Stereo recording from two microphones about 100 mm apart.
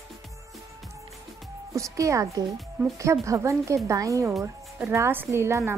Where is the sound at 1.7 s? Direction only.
30° right (ahead or behind).